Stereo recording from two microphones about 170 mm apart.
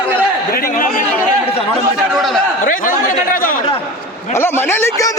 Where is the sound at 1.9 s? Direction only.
Centre (ahead or behind).